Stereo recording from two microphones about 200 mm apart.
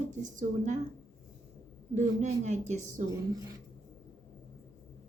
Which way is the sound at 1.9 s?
35° right (ahead or behind).